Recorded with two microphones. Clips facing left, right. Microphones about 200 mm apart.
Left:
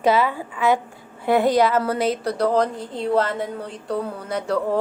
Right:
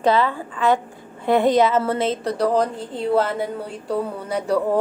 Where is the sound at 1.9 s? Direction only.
25° right (ahead or behind).